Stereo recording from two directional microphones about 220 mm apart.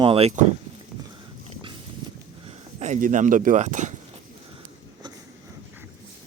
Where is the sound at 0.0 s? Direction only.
25° right (ahead or behind).